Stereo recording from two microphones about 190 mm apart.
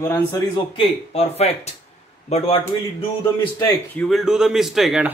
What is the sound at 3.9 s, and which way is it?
Speech, 5° left (ahead or behind).